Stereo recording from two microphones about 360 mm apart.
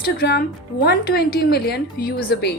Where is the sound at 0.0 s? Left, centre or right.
Left.